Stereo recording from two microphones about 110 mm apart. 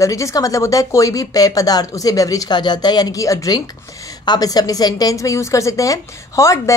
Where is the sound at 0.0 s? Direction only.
30° left (ahead or behind).